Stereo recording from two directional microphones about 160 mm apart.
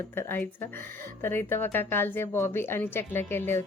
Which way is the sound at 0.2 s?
15° left (ahead or behind).